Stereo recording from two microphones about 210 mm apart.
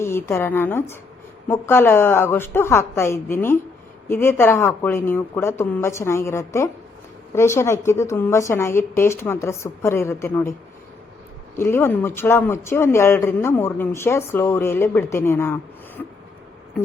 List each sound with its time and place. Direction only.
0.0 s a woman's voice: 10° left (ahead or behind)
11.5 s speech: 10° left (ahead or behind)
16.0 s a sound: 5° left (ahead or behind)